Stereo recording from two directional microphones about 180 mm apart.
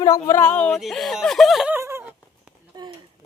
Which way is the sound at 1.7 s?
15° right (ahead or behind).